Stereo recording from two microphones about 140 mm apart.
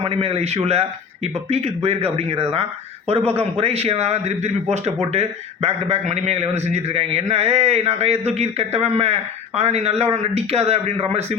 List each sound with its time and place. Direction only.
0.0 s speech: 45° right (ahead or behind)